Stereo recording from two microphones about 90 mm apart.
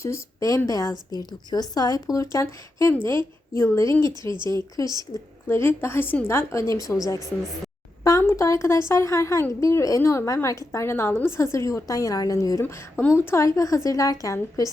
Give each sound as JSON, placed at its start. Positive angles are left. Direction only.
{"t": 0.0, "sound": "a woman's voice", "side_deg": 35}
{"t": 4.2, "sound": "speech", "side_deg": -55}
{"t": 4.4, "sound": "a woman's voice", "side_deg": 35}
{"t": 5.5, "sound": "a woman's voice", "side_deg": 25}
{"t": 8.2, "sound": "a woman's voice", "side_deg": 30}
{"t": 12.6, "sound": "a woman's voice", "side_deg": 25}